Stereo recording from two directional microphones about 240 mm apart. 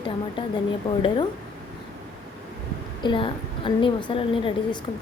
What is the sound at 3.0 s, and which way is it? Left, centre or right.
A woman's voice, left.